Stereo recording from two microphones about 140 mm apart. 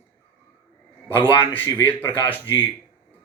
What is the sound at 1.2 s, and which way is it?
Speech, 15° left (ahead or behind).